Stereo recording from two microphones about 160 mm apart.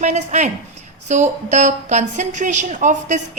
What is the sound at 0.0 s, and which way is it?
A woman's voice, 50° right (ahead or behind).